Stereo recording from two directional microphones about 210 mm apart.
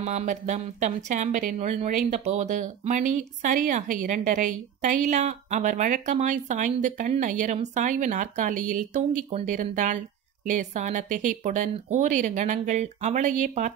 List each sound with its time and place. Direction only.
0.0 s speech: 35° right (ahead or behind)